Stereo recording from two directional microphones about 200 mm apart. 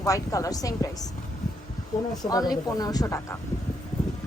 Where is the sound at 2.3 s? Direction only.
20° left (ahead or behind).